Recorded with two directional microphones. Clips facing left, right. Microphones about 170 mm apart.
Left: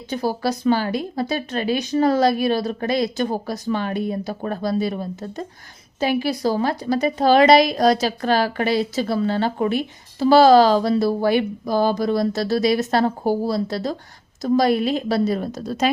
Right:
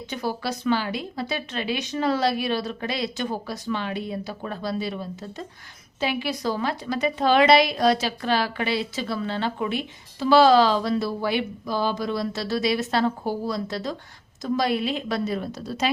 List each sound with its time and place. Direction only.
0.1 s a woman's voice: 40° left (ahead or behind)